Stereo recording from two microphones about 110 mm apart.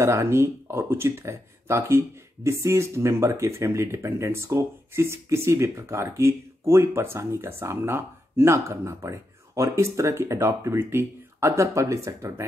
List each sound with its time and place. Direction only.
0.0 s speech: 25° right (ahead or behind)